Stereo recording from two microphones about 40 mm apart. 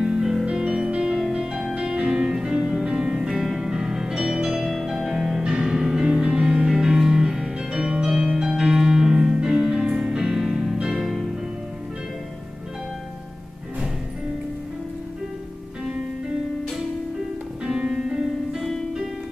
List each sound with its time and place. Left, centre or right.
0.0 s music: centre
1.5 s music: centre
1.8 s music: right
4.6 s music: centre
4.9 s music: centre
17.6 s music: centre